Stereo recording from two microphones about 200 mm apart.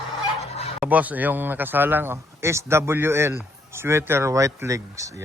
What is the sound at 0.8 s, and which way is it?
Speech, 5° right (ahead or behind).